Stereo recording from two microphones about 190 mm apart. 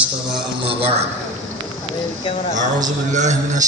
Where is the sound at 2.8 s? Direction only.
40° right (ahead or behind).